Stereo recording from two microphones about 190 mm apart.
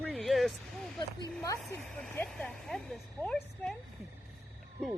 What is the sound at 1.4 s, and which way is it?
Speech, 15° left (ahead or behind).